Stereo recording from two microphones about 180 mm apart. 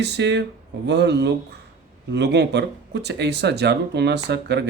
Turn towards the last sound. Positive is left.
turn(degrees=-70)  # may be behind; listen again after turning